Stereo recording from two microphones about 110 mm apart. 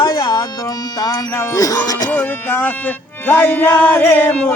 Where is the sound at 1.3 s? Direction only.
25° left (ahead or behind).